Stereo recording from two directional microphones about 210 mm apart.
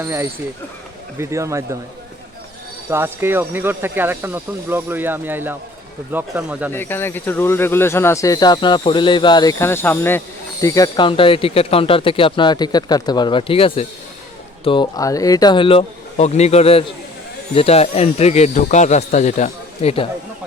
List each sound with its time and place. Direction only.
0.0 s speech: 10° right (ahead or behind)
2.9 s speech: 10° right (ahead or behind)
6.7 s speech: 10° left (ahead or behind); by 20.1 s 30° left (ahead or behind)